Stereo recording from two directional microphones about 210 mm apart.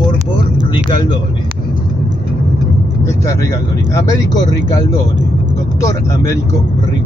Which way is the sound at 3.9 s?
15° left (ahead or behind).